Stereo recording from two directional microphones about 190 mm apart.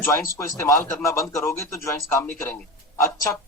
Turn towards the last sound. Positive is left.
turn(degrees=15)  # may be behind; listen again after turning